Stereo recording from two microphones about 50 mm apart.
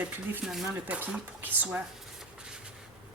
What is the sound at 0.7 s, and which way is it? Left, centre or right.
A woman's voice, right.